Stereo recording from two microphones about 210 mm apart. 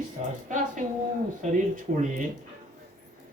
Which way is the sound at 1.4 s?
35° right (ahead or behind).